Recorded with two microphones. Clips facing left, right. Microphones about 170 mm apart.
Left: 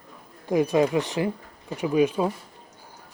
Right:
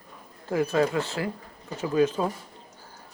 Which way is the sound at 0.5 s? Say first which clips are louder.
Left 3 dB; 15° left (ahead or behind).